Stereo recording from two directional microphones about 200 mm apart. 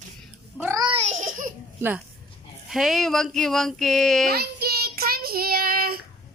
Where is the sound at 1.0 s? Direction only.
35° right (ahead or behind).